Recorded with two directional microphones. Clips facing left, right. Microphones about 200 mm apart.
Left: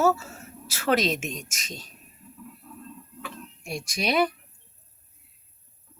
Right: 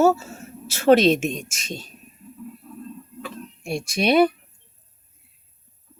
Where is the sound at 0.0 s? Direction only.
25° right (ahead or behind).